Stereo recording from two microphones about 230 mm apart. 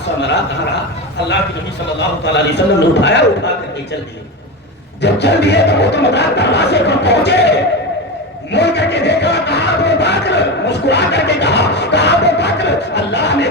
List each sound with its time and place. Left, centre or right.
0.2 s music: left
2.0 s music: left
5.0 s music: left